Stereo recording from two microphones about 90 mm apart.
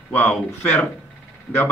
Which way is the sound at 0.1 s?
20° left (ahead or behind).